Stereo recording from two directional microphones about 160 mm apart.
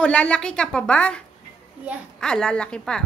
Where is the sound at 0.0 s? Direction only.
5° left (ahead or behind).